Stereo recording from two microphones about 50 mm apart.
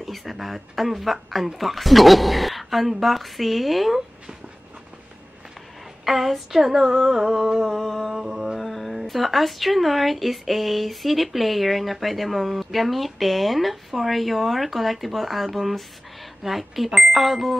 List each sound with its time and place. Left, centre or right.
0.0 s speech: centre
6.0 s speech: centre
8.1 s music: centre
8.5 s speech: centre